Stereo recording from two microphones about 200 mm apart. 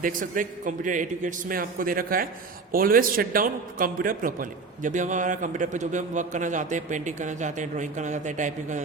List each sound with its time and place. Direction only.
0.0 s a man's voice: 40° right (ahead or behind)